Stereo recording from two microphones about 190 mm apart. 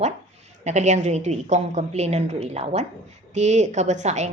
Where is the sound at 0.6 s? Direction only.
40° right (ahead or behind).